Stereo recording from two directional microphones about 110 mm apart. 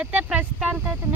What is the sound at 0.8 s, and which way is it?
Speech, 20° right (ahead or behind).